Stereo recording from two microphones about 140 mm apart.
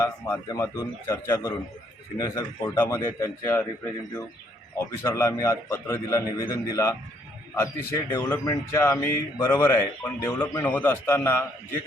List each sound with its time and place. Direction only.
0.0 s a man's voice: 20° left (ahead or behind)
4.8 s a man's voice: 20° left (ahead or behind)